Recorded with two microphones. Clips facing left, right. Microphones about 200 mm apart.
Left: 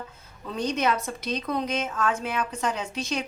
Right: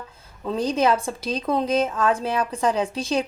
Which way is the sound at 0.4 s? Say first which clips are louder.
Right 5 dB; 30° right (ahead or behind).